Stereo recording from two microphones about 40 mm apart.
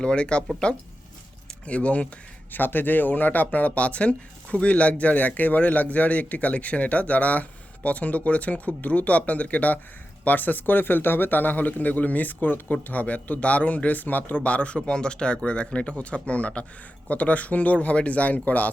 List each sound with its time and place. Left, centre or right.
0.0 s speech: left
1.6 s a man's voice: left
2.5 s a man's voice: left
12.9 s a man's voice: left
14.4 s a man's voice: left
14.8 s a man's voice: left